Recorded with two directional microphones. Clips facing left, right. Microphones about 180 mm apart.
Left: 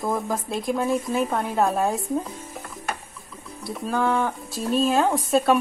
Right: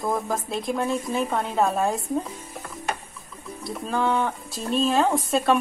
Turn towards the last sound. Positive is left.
turn(degrees=0)  # may be behind; listen again after turning